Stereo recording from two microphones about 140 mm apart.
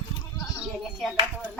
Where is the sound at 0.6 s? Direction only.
Centre (ahead or behind).